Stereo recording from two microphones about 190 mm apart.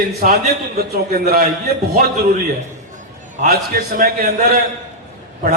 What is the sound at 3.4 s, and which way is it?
A man's voice, 50° right (ahead or behind).